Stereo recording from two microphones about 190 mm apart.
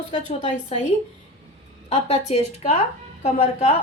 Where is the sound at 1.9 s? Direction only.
35° left (ahead or behind).